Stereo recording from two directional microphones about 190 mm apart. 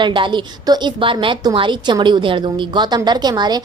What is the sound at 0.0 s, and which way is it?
A woman's voice, 25° right (ahead or behind).